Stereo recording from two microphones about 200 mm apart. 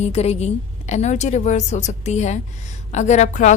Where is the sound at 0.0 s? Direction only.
30° left (ahead or behind).